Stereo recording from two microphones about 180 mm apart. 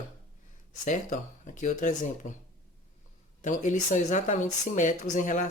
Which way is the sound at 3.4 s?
45° left (ahead or behind).